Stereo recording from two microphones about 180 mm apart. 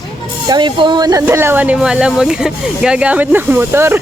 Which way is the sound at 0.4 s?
25° right (ahead or behind).